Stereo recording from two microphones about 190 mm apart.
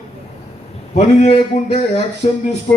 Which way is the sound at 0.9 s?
35° left (ahead or behind).